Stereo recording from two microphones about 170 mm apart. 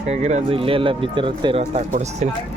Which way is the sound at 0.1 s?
40° right (ahead or behind).